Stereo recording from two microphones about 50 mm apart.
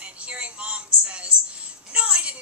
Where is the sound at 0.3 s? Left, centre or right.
Right.